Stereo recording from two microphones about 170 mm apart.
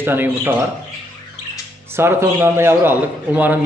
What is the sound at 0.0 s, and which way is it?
Speech, 10° right (ahead or behind).